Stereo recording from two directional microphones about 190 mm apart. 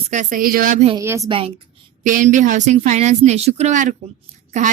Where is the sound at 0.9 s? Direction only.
15° right (ahead or behind).